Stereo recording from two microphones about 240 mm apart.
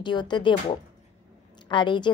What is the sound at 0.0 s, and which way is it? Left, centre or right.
A woman's voice, centre.